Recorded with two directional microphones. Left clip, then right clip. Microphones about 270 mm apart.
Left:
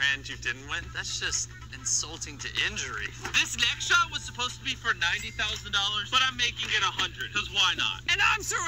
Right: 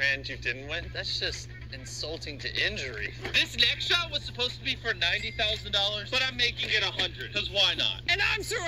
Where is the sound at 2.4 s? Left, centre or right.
Centre.